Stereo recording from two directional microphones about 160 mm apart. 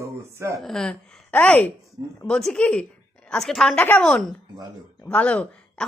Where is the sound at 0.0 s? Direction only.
20° right (ahead or behind).